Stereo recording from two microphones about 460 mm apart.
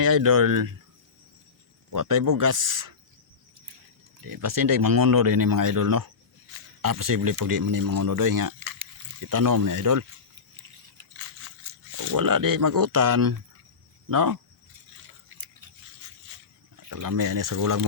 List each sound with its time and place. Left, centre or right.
0.0 s speech: right
1.9 s speech: right
4.3 s speech: right
12.1 s speech: right
16.9 s speech: right